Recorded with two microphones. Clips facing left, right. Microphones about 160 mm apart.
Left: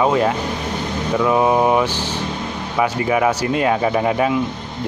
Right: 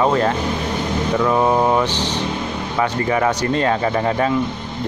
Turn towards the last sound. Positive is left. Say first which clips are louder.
# left 1 dB
turn(degrees=10)  # may be behind; listen again after turning